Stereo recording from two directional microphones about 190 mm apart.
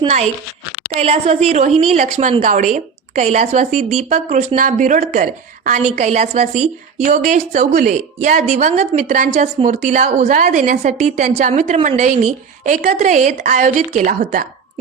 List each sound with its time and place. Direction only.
0.9 s speech: 35° right (ahead or behind)